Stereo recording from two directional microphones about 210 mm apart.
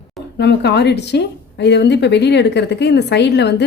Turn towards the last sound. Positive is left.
turn(degrees=55)  # may be behind; listen again after turning